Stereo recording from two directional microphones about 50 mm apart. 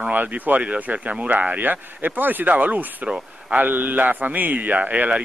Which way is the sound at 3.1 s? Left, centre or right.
Right.